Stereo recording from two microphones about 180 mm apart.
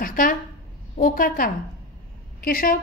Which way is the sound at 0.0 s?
50° left (ahead or behind).